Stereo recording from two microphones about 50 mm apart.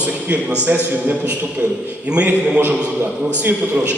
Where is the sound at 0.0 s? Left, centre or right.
Right.